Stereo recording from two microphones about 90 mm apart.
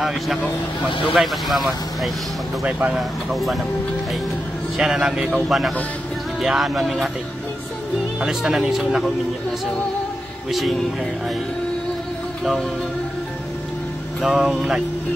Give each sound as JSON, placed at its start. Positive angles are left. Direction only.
{"t": 1.1, "sound": "speech", "side_deg": 0}
{"t": 2.6, "sound": "speech", "side_deg": -15}
{"t": 3.0, "sound": "speech", "side_deg": 0}
{"t": 4.7, "sound": "speech", "side_deg": -5}
{"t": 6.4, "sound": "speech", "side_deg": 0}
{"t": 8.2, "sound": "speech", "side_deg": -5}
{"t": 10.5, "sound": "speech", "side_deg": 0}
{"t": 14.2, "sound": "speech", "side_deg": -5}